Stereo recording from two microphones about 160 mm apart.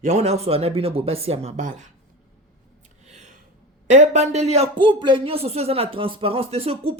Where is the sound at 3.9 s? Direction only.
50° right (ahead or behind).